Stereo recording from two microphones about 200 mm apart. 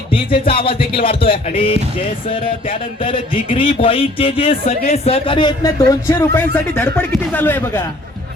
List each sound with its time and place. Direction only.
0.1 s speech: 25° left (ahead or behind); by 7.8 s 10° left (ahead or behind)